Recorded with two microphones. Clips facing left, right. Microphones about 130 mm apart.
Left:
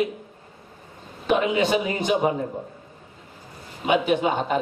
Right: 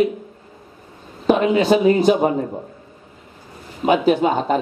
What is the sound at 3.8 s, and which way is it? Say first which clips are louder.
Speech: right 5 dB; 35° right (ahead or behind).